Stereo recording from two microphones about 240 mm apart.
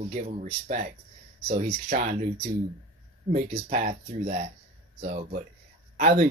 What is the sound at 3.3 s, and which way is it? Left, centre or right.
Speech, right.